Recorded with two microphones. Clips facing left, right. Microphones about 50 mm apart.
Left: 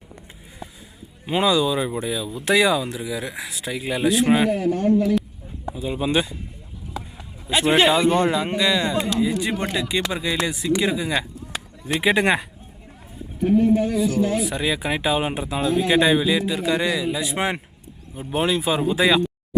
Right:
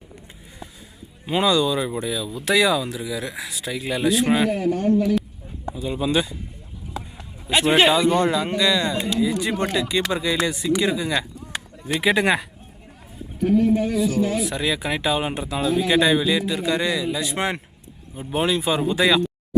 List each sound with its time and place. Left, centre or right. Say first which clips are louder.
1.3 s speech: even; centre
5.6 s a sound: even; centre
6.1 s speech: even; left
6.9 s a sound: even; centre
7.9 s speech: even; left; by 12.5 s centre
13.4 s speech: left 1 dB; centre